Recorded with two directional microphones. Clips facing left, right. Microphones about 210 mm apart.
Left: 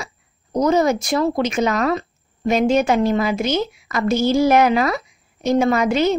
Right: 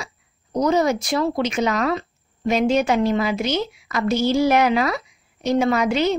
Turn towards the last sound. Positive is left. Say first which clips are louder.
# left 2 dB
turn(degrees=45)  # may be behind; listen again after turning